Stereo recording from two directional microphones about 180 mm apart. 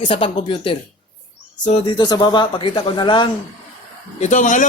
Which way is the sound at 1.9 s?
25° left (ahead or behind).